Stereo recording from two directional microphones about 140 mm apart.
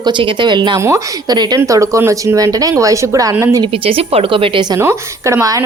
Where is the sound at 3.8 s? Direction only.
40° right (ahead or behind).